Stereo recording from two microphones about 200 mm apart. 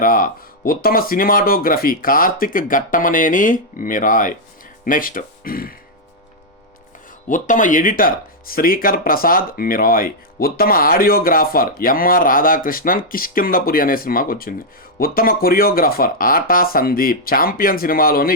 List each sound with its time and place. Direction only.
0.0 s speech: 45° left (ahead or behind)
7.3 s speech: 40° left (ahead or behind)